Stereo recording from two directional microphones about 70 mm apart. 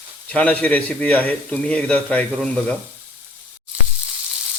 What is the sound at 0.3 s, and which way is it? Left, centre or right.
Speech, left.